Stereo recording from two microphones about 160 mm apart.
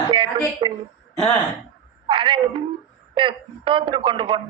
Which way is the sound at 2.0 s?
30° right (ahead or behind).